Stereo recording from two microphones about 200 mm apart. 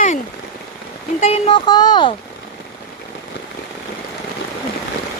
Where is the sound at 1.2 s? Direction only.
30° left (ahead or behind).